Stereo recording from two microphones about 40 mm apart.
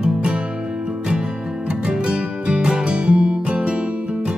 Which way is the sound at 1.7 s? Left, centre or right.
Right.